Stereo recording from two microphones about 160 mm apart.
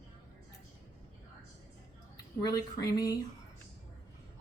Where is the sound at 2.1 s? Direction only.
25° left (ahead or behind).